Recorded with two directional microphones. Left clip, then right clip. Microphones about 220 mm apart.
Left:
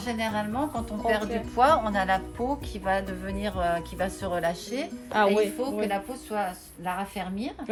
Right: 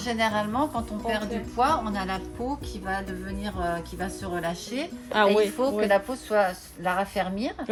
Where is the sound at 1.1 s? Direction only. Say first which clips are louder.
Left 1 dB; 15° left (ahead or behind).